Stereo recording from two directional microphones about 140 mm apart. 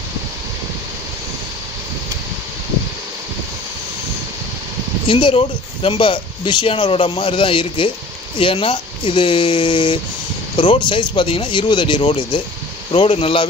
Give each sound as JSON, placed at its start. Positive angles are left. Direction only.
{"t": 5.0, "sound": "speech", "side_deg": 40}